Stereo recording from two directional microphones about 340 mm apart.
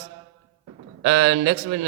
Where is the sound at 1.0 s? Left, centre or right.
Right.